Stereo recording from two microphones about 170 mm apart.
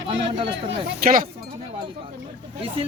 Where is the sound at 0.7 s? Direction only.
60° right (ahead or behind).